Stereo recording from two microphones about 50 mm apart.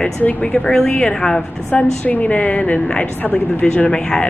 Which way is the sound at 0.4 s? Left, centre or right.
Left.